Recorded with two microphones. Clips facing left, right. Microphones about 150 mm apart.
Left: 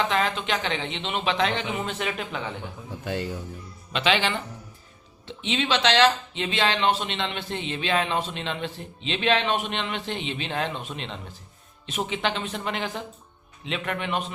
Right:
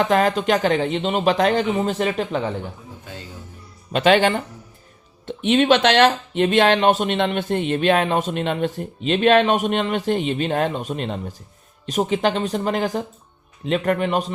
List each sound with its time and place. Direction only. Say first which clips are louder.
0.0 s speech: right 7 dB; 45° right (ahead or behind)
3.9 s speech: right 8 dB; 45° right (ahead or behind)